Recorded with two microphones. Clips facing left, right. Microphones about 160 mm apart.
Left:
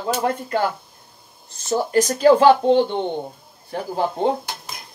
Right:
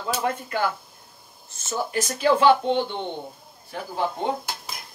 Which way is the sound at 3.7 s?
35° left (ahead or behind).